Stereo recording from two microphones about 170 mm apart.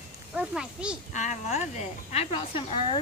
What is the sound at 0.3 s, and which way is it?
Speech, 5° right (ahead or behind).